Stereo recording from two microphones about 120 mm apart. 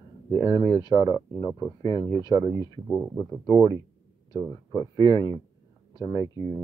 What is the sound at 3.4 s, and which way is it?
Speech, 30° left (ahead or behind).